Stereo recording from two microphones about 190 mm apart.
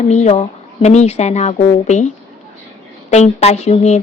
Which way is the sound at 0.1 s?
35° left (ahead or behind).